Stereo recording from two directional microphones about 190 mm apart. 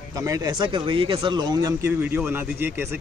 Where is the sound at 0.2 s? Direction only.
20° right (ahead or behind).